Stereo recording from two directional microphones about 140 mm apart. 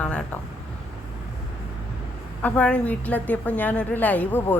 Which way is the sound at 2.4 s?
10° left (ahead or behind).